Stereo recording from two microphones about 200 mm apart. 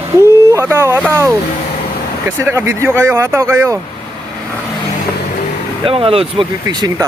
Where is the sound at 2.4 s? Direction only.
15° right (ahead or behind).